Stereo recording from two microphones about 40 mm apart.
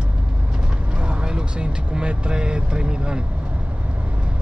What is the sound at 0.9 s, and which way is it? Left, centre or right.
Vehicle, right.